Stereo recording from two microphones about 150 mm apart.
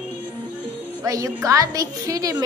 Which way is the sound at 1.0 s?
20° right (ahead or behind).